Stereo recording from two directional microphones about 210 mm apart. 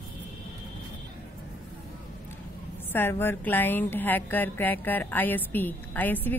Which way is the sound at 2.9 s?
10° left (ahead or behind).